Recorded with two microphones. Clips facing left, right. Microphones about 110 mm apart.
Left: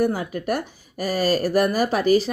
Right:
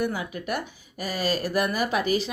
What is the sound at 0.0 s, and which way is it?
A woman's voice, 45° left (ahead or behind).